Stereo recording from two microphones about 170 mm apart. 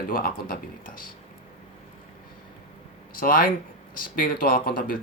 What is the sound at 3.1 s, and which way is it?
Speech, 55° left (ahead or behind).